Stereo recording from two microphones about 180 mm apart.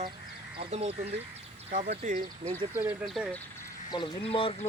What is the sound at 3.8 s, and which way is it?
Speech, 25° left (ahead or behind).